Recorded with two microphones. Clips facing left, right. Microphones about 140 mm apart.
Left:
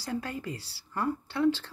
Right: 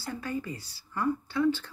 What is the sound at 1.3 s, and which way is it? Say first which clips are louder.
Speech: left 2 dB; 90° left.